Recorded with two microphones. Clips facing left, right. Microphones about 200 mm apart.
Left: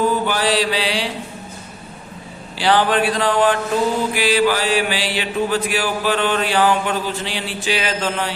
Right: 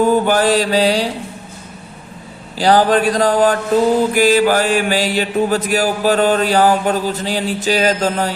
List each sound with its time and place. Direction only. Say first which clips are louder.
0.1 s mantra: right 6 dB; 45° right (ahead or behind)
2.6 s mantra: right 4 dB; 40° right (ahead or behind)